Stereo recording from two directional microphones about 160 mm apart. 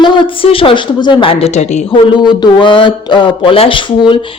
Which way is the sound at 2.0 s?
30° left (ahead or behind).